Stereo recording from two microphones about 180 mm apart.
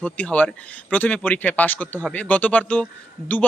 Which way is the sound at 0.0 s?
5° left (ahead or behind).